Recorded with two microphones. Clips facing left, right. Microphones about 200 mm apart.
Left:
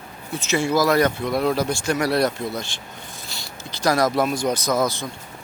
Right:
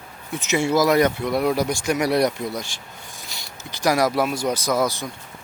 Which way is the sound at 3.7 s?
15° right (ahead or behind).